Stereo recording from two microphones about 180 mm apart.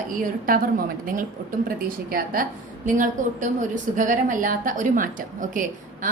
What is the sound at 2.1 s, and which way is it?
A woman's voice, 55° right (ahead or behind).